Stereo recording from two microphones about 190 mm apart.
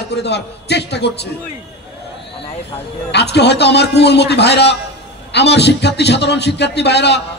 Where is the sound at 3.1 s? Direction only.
65° left (ahead or behind).